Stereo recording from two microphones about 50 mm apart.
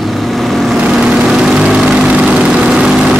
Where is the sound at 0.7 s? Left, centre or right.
Centre.